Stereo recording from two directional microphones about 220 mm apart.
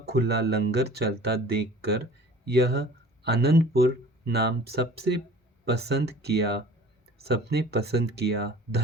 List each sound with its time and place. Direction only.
0.0 s speech: 45° right (ahead or behind)